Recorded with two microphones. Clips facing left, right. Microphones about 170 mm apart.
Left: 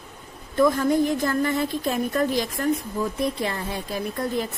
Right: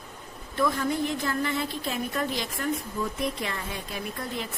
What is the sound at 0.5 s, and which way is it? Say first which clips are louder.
A woman's voice: left 7 dB; 40° left (ahead or behind).